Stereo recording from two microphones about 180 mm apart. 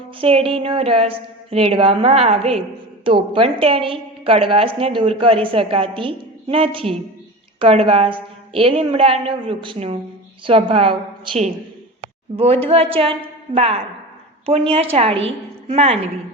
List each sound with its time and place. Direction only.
0.2 s a woman's voice: 30° right (ahead or behind)